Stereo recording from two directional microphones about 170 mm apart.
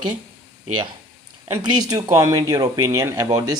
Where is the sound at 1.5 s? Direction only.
25° right (ahead or behind).